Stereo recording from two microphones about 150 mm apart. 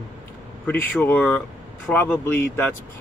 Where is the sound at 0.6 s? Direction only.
10° left (ahead or behind).